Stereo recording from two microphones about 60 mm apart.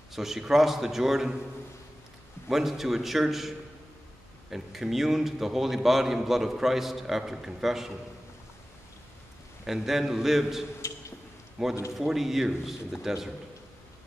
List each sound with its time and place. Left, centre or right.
0.1 s a man's voice: centre
2.5 s a man's voice: centre
9.7 s a man's voice: centre